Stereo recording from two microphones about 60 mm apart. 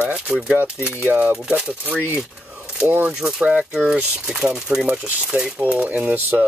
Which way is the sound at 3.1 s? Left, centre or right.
Centre.